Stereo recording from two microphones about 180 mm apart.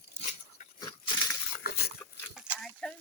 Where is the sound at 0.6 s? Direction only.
45° left (ahead or behind).